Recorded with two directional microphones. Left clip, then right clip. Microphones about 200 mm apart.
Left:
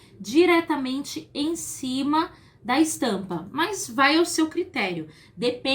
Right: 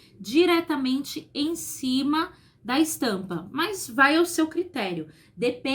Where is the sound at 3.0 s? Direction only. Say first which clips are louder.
Left 1 dB; 15° right (ahead or behind).